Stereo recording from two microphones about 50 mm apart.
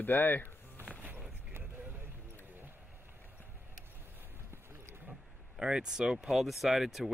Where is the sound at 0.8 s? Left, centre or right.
Right.